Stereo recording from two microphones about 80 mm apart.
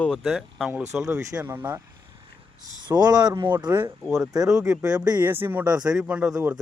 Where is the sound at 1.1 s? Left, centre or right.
Right.